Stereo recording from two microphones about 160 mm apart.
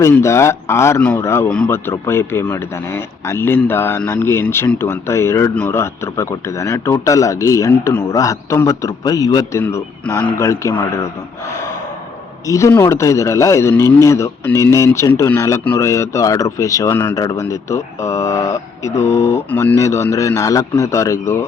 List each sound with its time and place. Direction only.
0.0 s speech: 15° left (ahead or behind)
12.5 s speech: 20° left (ahead or behind)